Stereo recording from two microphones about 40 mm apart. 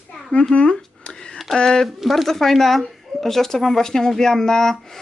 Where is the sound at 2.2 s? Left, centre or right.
Centre.